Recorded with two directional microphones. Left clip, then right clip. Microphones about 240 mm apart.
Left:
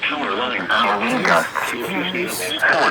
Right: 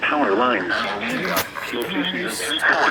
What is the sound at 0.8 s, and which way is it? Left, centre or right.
Speech, left.